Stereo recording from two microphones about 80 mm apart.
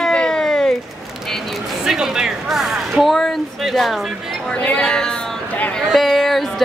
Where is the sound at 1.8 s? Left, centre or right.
Centre.